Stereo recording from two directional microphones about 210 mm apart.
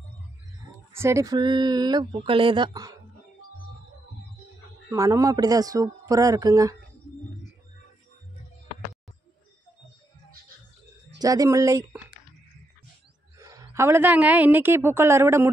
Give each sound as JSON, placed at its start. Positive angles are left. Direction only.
{"t": 0.9, "sound": "speech", "side_deg": -15}
{"t": 4.8, "sound": "a man's voice", "side_deg": -15}
{"t": 11.1, "sound": "a man's voice", "side_deg": -15}
{"t": 13.4, "sound": "a woman's voice", "side_deg": -15}